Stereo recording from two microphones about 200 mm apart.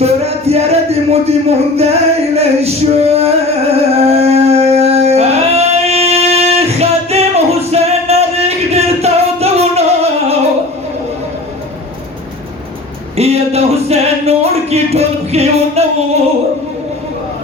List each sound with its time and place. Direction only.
0.0 s speech: 30° right (ahead or behind)
3.7 s a sound: 30° right (ahead or behind)
13.1 s music: 30° right (ahead or behind)